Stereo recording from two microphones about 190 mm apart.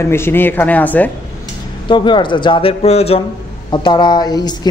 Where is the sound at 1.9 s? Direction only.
25° left (ahead or behind).